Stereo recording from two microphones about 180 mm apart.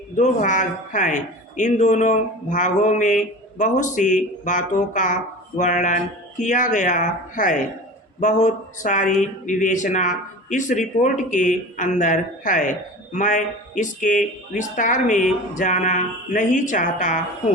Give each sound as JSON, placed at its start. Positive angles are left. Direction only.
{"t": 0.2, "sound": "speech", "side_deg": 45}